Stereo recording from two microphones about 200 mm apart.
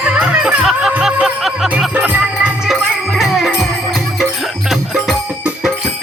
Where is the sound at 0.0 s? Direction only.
5° right (ahead or behind).